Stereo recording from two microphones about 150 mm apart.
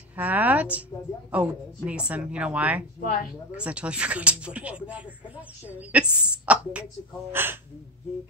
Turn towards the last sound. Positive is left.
turn(degrees=-15)  # may be behind; listen again after turning